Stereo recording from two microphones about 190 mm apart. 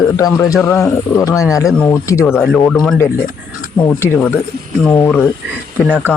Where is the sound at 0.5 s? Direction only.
15° left (ahead or behind).